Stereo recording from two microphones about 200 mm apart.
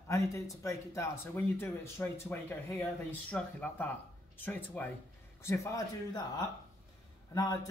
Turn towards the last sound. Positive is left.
turn(degrees=20)  # may be behind; listen again after turning